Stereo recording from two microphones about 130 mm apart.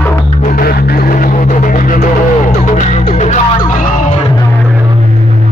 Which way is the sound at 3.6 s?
90° left.